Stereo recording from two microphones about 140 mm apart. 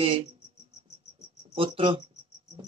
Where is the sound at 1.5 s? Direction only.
40° right (ahead or behind).